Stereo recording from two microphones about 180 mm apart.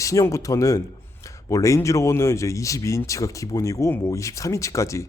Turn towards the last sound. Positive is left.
turn(degrees=15)  # may be behind; listen again after turning